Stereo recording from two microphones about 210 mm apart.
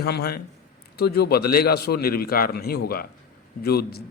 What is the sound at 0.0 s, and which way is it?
Speech, 50° left (ahead or behind).